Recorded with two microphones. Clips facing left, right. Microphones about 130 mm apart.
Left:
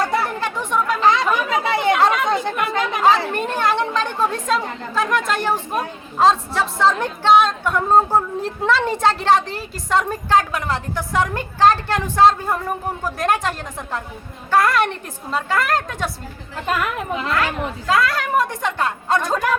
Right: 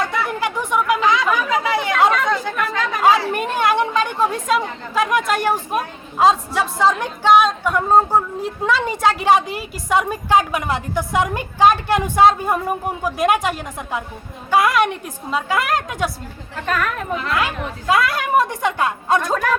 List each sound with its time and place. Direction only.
0.3 s chatter: 10° right (ahead or behind)
1.0 s chatter: 30° left (ahead or behind)
2.0 s chatter: 20° left (ahead or behind)
3.3 s a woman's voice: 15° right (ahead or behind)
16.6 s speech: 15° left (ahead or behind)
17.3 s a woman's voice: 15° right (ahead or behind)